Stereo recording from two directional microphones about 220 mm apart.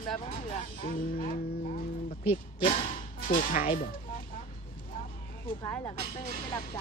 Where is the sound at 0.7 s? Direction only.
40° left (ahead or behind).